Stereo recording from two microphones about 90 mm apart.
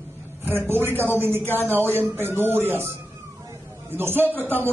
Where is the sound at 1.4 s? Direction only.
25° left (ahead or behind).